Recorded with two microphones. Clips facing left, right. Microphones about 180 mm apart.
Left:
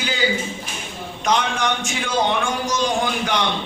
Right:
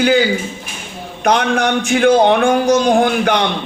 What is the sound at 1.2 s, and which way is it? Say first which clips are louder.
A man's voice: right 6 dB; 60° right (ahead or behind).